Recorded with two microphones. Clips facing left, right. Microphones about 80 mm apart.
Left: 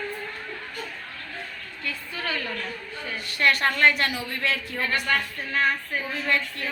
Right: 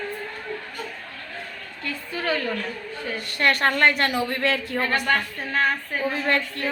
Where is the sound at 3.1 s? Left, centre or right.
Right.